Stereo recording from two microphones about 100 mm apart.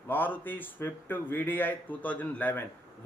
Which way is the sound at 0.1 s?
20° left (ahead or behind).